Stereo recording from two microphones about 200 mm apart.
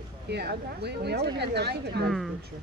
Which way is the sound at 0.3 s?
55° right (ahead or behind).